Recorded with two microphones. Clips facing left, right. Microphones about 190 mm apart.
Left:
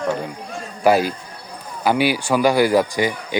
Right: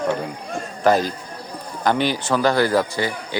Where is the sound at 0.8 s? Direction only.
10° left (ahead or behind).